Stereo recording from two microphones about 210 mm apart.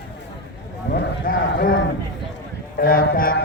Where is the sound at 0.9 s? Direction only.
45° left (ahead or behind).